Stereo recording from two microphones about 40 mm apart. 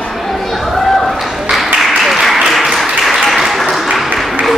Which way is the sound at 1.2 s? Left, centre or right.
Centre.